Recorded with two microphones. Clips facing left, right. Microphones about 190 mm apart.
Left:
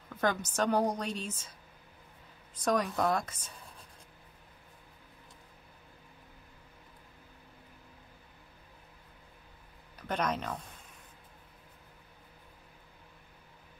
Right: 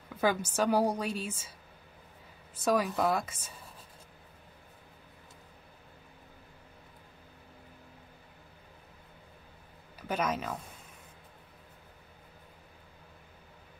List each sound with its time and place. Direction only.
0.2 s a woman's voice: 10° right (ahead or behind)
2.5 s speech: 5° right (ahead or behind)
9.9 s speech: 5° right (ahead or behind)